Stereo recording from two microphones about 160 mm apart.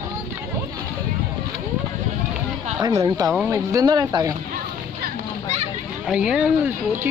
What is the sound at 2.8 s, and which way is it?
Speech, 20° right (ahead or behind).